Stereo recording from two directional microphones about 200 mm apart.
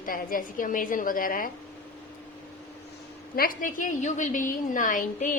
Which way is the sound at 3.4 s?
45° left (ahead or behind).